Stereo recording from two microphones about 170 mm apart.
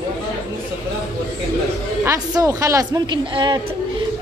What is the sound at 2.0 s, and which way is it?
Speech, 20° right (ahead or behind).